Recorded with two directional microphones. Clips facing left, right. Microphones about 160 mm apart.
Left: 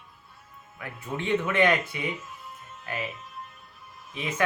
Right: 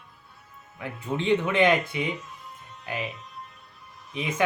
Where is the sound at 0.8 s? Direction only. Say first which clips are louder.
Right 4 dB; 20° right (ahead or behind).